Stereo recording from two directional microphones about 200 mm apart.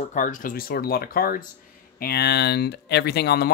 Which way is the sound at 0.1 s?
40° left (ahead or behind).